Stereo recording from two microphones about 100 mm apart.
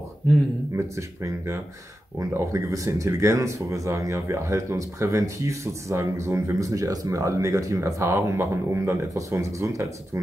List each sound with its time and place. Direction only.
0.7 s speech: 30° right (ahead or behind)